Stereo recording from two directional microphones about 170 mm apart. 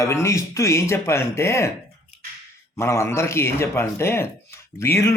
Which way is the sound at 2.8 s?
15° left (ahead or behind).